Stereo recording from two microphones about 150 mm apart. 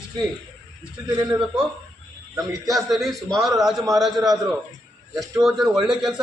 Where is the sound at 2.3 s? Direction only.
25° right (ahead or behind).